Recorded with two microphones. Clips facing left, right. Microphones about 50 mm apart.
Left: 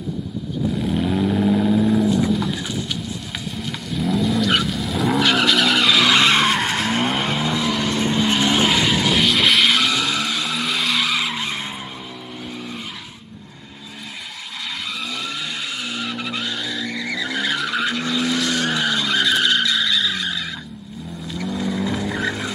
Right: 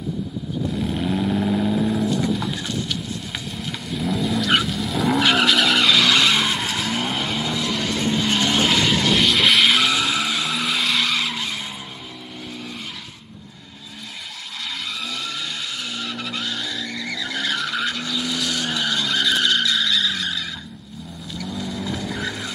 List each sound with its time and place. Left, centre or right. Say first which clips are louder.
0.7 s vehicle: left 2 dB; centre
6.1 s vehicle: left 3 dB; left
6.5 s vehicle: left 4 dB; left; by 11.4 s centre
15.8 s vehicle: left 2 dB; centre
18.0 s vehicle: left 4 dB; left
18.8 s skidding: left 2 dB; centre
21.6 s vehicle: left 7 dB; centre